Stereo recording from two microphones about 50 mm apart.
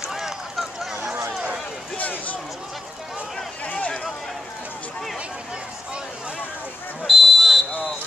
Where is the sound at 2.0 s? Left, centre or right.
Left.